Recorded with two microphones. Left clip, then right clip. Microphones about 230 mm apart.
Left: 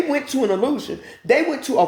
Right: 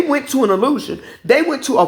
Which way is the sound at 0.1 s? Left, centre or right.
Right.